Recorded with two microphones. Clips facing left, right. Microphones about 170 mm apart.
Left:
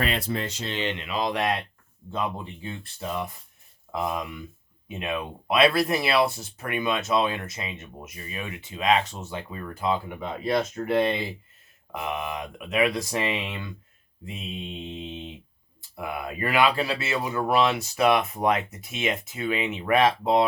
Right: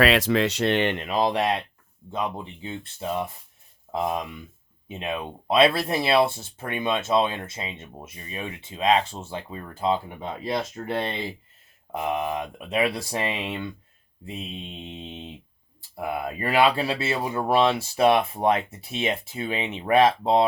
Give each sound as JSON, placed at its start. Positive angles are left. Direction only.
{"t": 0.0, "sound": "speech", "side_deg": -90}
{"t": 2.0, "sound": "speech", "side_deg": -15}
{"t": 16.0, "sound": "speech", "side_deg": -30}